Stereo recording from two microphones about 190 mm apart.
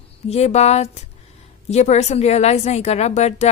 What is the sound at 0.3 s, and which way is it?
A woman's voice, 35° left (ahead or behind).